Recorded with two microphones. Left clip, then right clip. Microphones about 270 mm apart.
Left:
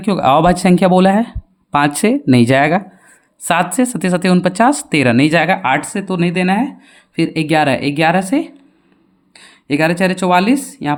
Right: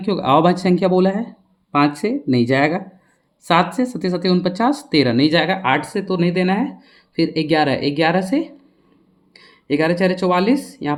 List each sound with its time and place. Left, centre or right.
0.0 s speech: left